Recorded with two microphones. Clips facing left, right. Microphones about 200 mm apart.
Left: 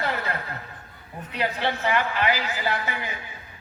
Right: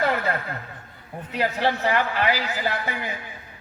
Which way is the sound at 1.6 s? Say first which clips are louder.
Right 2 dB; 40° right (ahead or behind).